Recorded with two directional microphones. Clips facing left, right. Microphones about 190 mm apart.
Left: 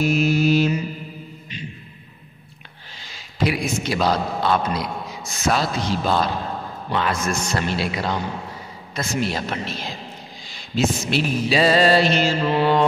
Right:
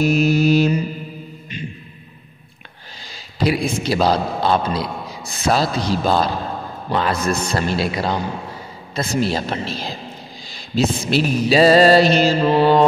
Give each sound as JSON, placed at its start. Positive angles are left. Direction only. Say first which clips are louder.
{"t": 0.0, "sound": "mantra", "louder": "right 3 dB", "side_deg": -40}
{"t": 1.5, "sound": "music", "louder": "right 4 dB", "side_deg": -50}
{"t": 3.0, "sound": "a man's voice", "louder": "right 2 dB", "side_deg": -35}
{"t": 5.4, "sound": "a sound", "louder": "right 3 dB", "side_deg": -35}